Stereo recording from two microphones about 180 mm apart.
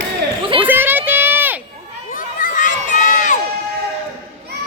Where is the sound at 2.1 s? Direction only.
50° left (ahead or behind).